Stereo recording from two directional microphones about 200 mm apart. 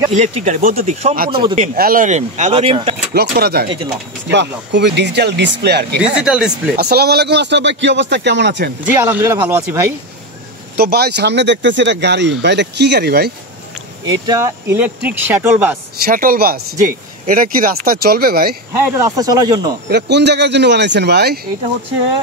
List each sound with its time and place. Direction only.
0.1 s speech: 35° right (ahead or behind)
2.5 s speech: 25° right (ahead or behind)
3.2 s speech: 50° right (ahead or behind)
6.2 s speech: 5° right (ahead or behind)
6.8 s speech: 50° right (ahead or behind)
8.8 s speech: 10° right (ahead or behind)
10.8 s speech: 50° right (ahead or behind)
14.0 s speech: 20° right (ahead or behind)
16.1 s speech: 45° right (ahead or behind)
18.8 s speech: 15° right (ahead or behind)
19.9 s speech: 55° right (ahead or behind)